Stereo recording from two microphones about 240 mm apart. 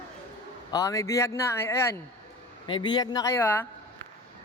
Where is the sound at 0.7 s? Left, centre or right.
Centre.